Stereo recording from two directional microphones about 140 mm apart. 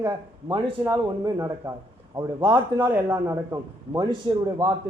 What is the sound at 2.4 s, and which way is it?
Speech, 35° right (ahead or behind).